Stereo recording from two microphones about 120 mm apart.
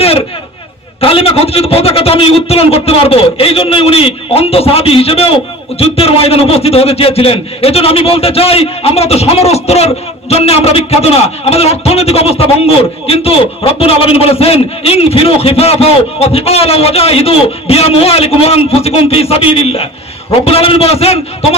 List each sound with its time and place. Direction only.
1.0 s a man's voice: 50° left (ahead or behind)